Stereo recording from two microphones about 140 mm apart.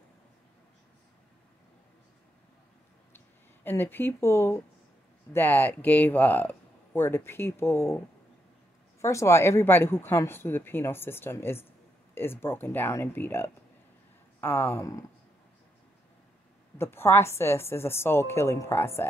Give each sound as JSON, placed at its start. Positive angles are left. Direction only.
{"t": 3.6, "sound": "speech", "side_deg": 15}
{"t": 9.0, "sound": "speech", "side_deg": 20}
{"t": 16.7, "sound": "speech", "side_deg": 15}